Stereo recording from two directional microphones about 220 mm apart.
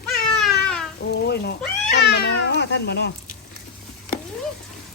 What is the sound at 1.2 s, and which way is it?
Cat, 45° left (ahead or behind).